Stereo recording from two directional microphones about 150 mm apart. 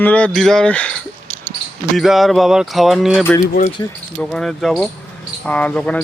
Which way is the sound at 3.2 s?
20° left (ahead or behind).